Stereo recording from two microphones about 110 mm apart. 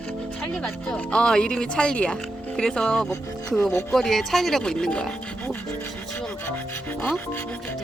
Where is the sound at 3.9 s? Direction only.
Centre (ahead or behind).